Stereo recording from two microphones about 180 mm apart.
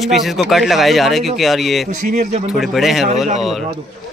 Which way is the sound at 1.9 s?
40° right (ahead or behind).